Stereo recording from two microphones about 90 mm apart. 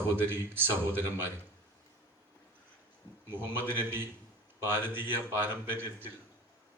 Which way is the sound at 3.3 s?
25° right (ahead or behind).